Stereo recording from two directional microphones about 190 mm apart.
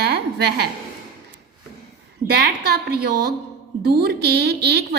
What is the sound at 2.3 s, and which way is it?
A woman's voice, 60° right (ahead or behind).